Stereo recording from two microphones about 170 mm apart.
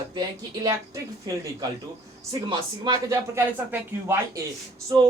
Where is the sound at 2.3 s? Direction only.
25° right (ahead or behind).